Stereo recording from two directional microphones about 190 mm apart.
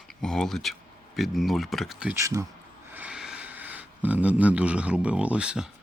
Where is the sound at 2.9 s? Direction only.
5° right (ahead or behind).